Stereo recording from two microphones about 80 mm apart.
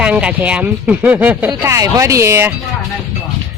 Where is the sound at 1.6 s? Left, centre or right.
Right.